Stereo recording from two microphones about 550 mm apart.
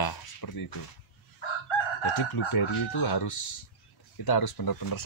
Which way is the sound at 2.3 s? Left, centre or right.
Left.